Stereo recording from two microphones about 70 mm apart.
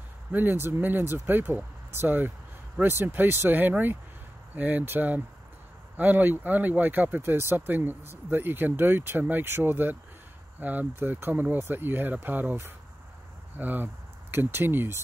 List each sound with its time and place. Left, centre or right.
0.3 s speech: right
13.6 s speech: right